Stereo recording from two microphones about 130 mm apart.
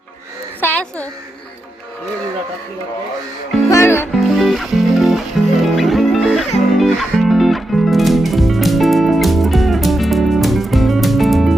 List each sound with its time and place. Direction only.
0.6 s a sound: 10° left (ahead or behind)
3.7 s music: 20° left (ahead or behind)
4.1 s music: centre (ahead or behind)